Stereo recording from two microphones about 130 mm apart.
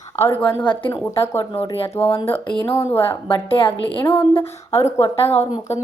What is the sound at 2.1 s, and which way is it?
Speech, 45° left (ahead or behind).